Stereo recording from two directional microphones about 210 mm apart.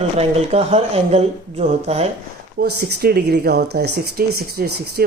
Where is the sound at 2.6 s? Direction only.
50° right (ahead or behind).